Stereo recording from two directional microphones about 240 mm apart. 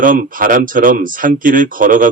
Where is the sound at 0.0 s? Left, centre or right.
Right.